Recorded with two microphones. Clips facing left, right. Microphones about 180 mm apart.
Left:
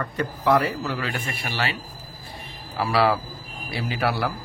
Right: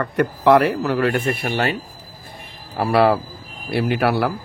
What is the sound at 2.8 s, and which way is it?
A man's voice, 55° right (ahead or behind).